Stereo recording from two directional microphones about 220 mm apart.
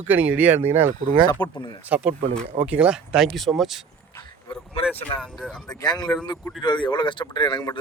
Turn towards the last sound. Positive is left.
turn(degrees=20)  # may be behind; listen again after turning